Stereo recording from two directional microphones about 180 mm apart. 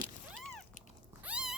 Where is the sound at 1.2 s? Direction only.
5° right (ahead or behind).